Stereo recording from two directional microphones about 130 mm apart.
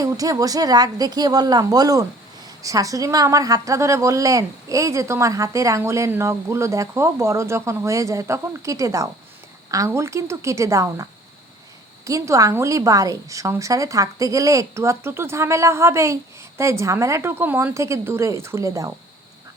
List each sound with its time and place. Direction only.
0.0 s a woman's voice: 30° right (ahead or behind)